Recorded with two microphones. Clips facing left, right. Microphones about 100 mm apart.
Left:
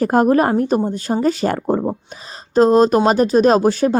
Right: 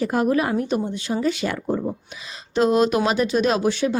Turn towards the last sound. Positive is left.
turn(degrees=40)  # may be behind; listen again after turning